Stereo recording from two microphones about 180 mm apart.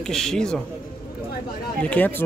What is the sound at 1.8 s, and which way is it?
Speech, 10° left (ahead or behind).